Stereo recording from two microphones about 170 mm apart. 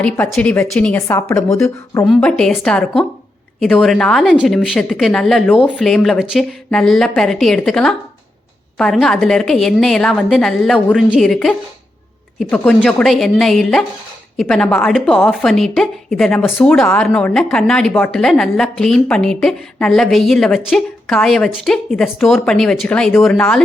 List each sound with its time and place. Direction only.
0.0 s a woman's voice: 5° left (ahead or behind)
1.0 s a woman's voice: 15° left (ahead or behind)
2.0 s a woman's voice: centre (ahead or behind)